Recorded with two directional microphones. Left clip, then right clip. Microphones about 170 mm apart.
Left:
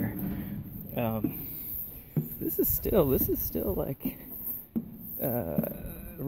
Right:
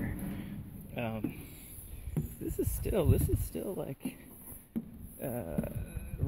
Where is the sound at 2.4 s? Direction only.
15° left (ahead or behind).